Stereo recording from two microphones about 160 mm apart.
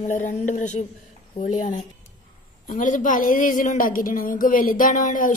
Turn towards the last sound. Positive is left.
turn(degrees=55)  # may be behind; listen again after turning